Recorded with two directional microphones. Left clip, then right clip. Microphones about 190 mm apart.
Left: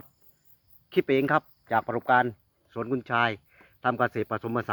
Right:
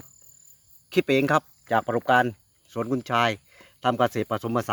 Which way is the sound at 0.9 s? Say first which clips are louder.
Right 2 dB; 75° right (ahead or behind).